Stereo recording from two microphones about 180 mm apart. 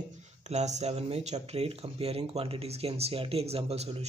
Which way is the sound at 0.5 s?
40° right (ahead or behind).